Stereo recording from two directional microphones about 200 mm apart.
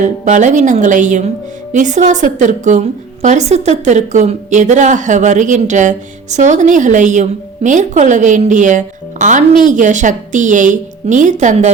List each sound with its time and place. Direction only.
0.0 s a woman's voice: 40° right (ahead or behind)